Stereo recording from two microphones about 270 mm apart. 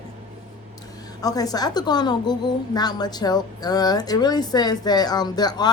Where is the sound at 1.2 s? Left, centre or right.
Centre.